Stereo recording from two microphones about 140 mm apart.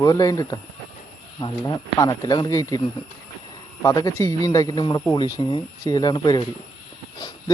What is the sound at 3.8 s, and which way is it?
Speech, 25° left (ahead or behind).